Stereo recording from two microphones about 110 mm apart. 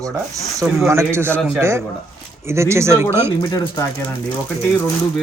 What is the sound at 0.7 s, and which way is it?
Speech, 25° right (ahead or behind).